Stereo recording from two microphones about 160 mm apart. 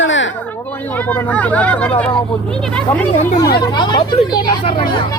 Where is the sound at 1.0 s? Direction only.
10° left (ahead or behind).